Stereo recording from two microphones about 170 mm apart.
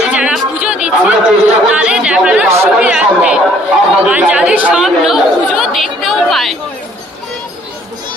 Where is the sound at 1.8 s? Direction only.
5° right (ahead or behind).